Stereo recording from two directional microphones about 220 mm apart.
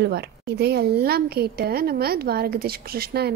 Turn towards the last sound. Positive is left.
turn(degrees=-45)  # may be behind; listen again after turning